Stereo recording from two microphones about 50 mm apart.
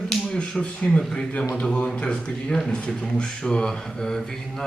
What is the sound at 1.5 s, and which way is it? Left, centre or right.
Speech, centre.